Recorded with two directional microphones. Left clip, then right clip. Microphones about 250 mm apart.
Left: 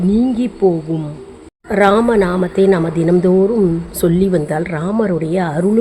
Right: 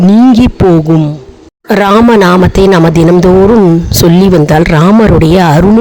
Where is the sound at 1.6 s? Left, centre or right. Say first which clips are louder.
Right 6 dB; right.